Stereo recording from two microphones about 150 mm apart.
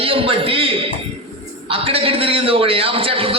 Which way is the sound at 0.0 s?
40° right (ahead or behind).